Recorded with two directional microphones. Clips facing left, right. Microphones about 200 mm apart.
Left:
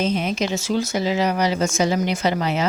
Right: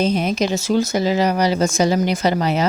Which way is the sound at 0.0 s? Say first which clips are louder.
Right 3 dB; 40° right (ahead or behind).